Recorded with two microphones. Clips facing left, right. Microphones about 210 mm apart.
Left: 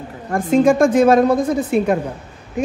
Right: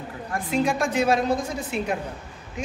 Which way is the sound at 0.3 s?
45° left (ahead or behind).